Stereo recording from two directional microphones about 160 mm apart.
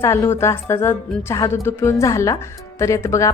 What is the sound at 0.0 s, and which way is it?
A woman's voice, 15° left (ahead or behind).